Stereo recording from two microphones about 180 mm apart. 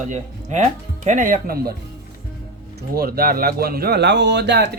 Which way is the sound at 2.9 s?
60° right (ahead or behind).